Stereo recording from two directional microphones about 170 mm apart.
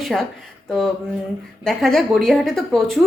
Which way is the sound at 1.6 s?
Centre (ahead or behind).